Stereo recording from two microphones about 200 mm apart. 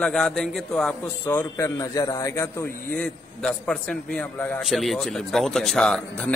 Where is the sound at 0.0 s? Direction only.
5° left (ahead or behind).